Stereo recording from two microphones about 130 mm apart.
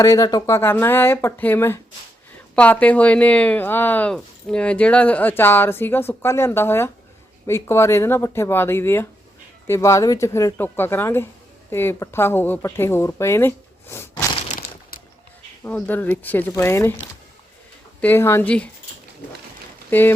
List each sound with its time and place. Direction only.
0.0 s speech: 30° left (ahead or behind)
13.9 s a sound: 20° left (ahead or behind)
15.6 s speech: 15° left (ahead or behind)
18.0 s speech: 15° left (ahead or behind)
19.9 s speech: 15° left (ahead or behind)